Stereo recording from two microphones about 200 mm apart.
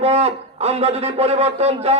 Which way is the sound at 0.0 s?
30° right (ahead or behind).